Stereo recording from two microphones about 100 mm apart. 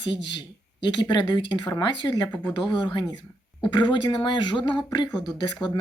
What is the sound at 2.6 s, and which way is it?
Speech, 50° left (ahead or behind).